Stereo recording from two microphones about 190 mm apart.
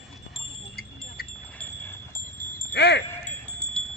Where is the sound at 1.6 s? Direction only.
10° left (ahead or behind).